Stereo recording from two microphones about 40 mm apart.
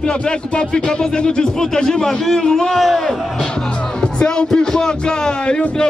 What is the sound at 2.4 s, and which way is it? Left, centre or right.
Music, centre.